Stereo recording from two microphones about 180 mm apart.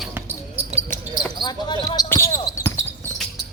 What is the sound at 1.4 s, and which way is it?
Speech, 25° left (ahead or behind).